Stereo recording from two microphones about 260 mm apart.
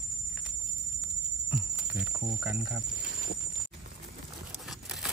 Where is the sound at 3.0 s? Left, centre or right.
Right.